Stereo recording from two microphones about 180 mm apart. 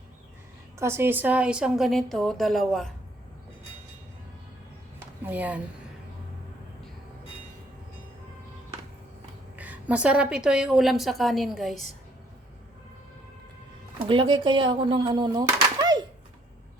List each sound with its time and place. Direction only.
0.8 s a woman's voice: 15° right (ahead or behind); by 2.9 s centre (ahead or behind)
5.2 s speech: 10° right (ahead or behind)
9.6 s a woman's voice: 10° right (ahead or behind)
14.1 s speech: 25° right (ahead or behind)